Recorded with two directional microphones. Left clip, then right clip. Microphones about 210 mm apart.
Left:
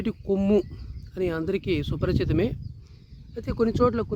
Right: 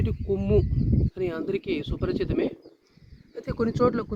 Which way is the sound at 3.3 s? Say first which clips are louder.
Left 3 dB; 35° left (ahead or behind).